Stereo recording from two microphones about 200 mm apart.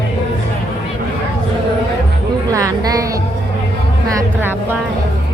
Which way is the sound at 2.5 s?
15° right (ahead or behind).